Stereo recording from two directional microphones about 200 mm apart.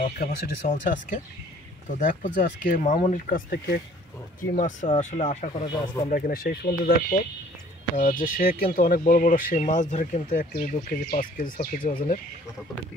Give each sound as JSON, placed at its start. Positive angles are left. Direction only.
{"t": 0.0, "sound": "speech", "side_deg": 40}
{"t": 4.4, "sound": "speech", "side_deg": 40}
{"t": 6.0, "sound": "speech", "side_deg": 45}